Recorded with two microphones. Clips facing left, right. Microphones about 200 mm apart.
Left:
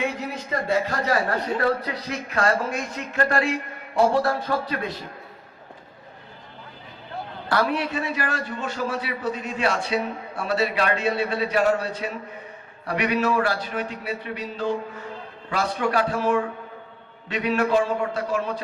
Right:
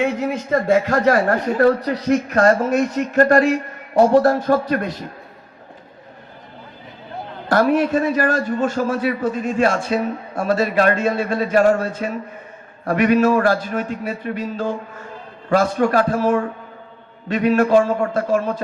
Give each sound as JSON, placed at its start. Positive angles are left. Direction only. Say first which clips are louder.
{"t": 0.7, "sound": "a man's voice", "louder": "right 7 dB", "side_deg": -50}
{"t": 7.4, "sound": "a man's voice", "louder": "right 8 dB", "side_deg": -45}